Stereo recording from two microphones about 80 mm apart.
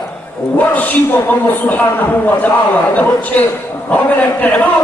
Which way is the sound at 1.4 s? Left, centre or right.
Left.